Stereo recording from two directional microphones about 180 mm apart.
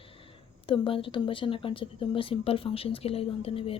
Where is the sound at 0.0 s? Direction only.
30° left (ahead or behind).